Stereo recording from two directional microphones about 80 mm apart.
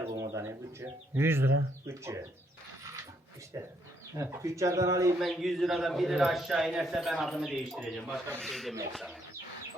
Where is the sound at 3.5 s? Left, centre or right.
Right.